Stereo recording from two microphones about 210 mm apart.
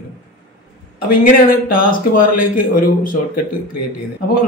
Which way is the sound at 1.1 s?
45° left (ahead or behind).